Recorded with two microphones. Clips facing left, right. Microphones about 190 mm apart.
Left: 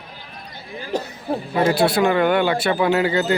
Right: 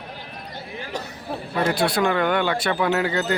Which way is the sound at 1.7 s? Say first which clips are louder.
Left 4 dB; 5° left (ahead or behind).